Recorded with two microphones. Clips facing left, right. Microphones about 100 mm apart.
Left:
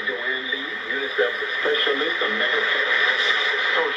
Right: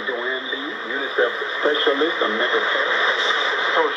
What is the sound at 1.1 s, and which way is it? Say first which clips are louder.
Speech: right 3 dB; 30° right (ahead or behind).